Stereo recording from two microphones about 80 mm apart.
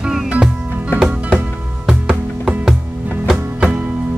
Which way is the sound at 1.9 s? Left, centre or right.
Centre.